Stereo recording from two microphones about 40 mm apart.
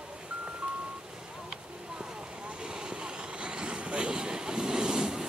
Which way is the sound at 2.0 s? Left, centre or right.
Right.